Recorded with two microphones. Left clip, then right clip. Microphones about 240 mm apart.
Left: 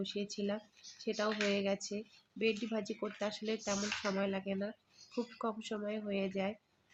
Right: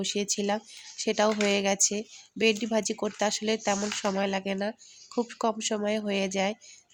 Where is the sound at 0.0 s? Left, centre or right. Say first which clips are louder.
Right 10 dB; right.